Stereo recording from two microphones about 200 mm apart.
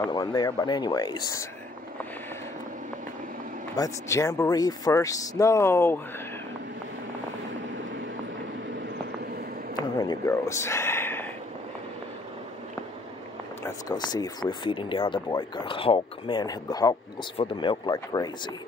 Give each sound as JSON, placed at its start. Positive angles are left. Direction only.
{"t": 0.0, "sound": "speech", "side_deg": 20}
{"t": 3.7, "sound": "speech", "side_deg": 15}
{"t": 9.8, "sound": "a sound", "side_deg": 20}
{"t": 13.7, "sound": "speech", "side_deg": 20}